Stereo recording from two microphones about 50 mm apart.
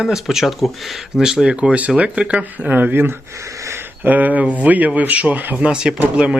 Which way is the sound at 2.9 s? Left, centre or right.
Right.